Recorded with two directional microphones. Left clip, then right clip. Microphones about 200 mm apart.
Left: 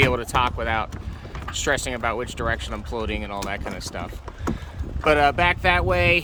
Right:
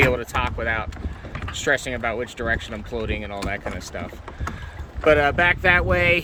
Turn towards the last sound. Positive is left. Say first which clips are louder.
# right 1 dB
turn(degrees=0)  # may be behind; listen again after turning